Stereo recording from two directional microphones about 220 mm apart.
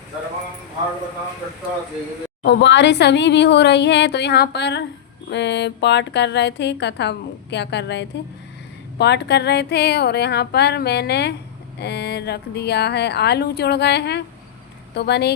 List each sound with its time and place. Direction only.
2.4 s a woman's voice: 50° left (ahead or behind)